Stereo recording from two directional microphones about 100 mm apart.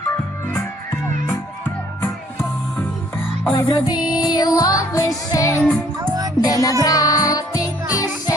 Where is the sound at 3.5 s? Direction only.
45° left (ahead or behind).